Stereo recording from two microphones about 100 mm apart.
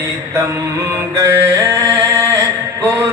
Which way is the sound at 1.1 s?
30° right (ahead or behind).